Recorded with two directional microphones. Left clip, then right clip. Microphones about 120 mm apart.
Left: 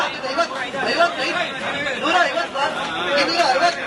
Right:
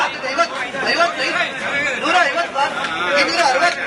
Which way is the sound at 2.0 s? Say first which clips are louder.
Right 1 dB; 15° right (ahead or behind).